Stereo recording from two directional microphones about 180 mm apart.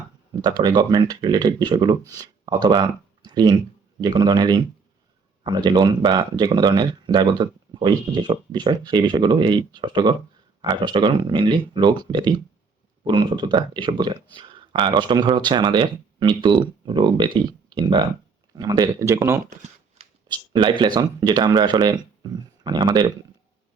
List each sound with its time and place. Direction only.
0.4 s speech: 25° right (ahead or behind)
20.0 s a sound: 35° right (ahead or behind)
20.3 s speech: 25° right (ahead or behind)